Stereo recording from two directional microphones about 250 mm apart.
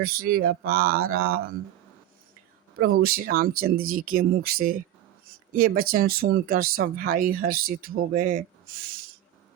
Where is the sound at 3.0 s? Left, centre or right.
Right.